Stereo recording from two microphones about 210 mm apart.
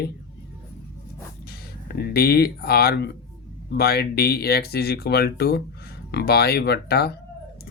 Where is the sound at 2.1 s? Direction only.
45° left (ahead or behind).